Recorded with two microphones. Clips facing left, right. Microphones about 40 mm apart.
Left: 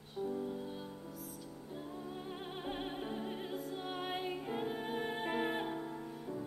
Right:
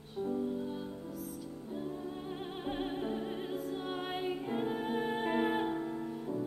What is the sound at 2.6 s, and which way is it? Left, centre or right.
Opera, centre.